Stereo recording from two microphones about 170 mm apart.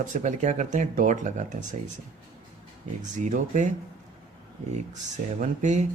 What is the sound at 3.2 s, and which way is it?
Speech, 45° right (ahead or behind).